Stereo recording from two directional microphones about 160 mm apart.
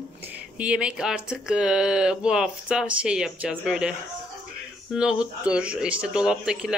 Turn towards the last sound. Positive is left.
turn(degrees=-5)  # may be behind; listen again after turning